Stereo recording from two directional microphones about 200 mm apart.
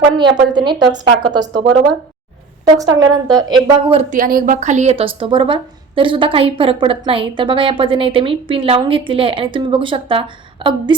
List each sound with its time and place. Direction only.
0.2 s a woman's voice: 25° right (ahead or behind)
2.7 s a woman's voice: 15° right (ahead or behind)
4.1 s a woman's voice: 45° right (ahead or behind); by 10.9 s 25° right (ahead or behind)